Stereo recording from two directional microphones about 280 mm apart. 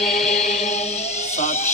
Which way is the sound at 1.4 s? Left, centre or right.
Left.